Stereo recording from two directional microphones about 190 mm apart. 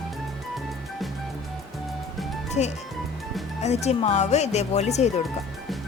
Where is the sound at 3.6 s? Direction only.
35° left (ahead or behind).